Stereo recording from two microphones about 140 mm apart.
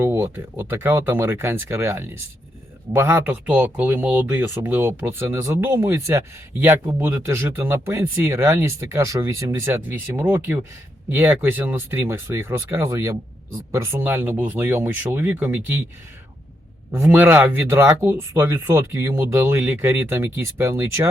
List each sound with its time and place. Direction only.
0.0 s speech: 15° right (ahead or behind)
16.9 s speech: 15° right (ahead or behind)